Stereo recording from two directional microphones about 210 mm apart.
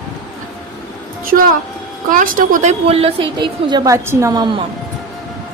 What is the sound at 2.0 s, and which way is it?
A woman's voice, 40° right (ahead or behind).